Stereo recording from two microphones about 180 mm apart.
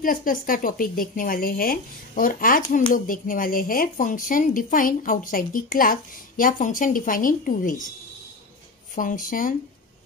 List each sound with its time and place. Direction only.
0.0 s speech: 50° left (ahead or behind)
8.9 s speech: 50° left (ahead or behind)